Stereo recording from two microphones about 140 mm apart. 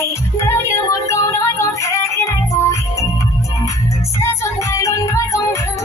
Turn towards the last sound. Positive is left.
turn(degrees=20)  # may be behind; listen again after turning